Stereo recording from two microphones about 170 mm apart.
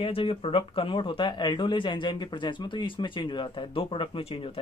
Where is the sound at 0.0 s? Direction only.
30° left (ahead or behind).